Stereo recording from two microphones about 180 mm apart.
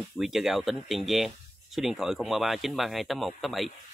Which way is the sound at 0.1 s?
Centre (ahead or behind).